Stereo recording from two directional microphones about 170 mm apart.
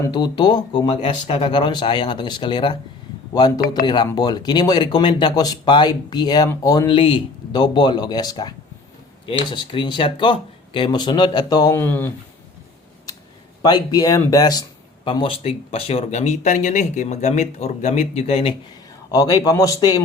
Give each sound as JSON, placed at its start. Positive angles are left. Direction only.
{"t": 0.0, "sound": "speech", "side_deg": 25}
{"t": 11.8, "sound": "speech", "side_deg": 10}
{"t": 13.6, "sound": "speech", "side_deg": 25}
{"t": 19.1, "sound": "speech", "side_deg": 20}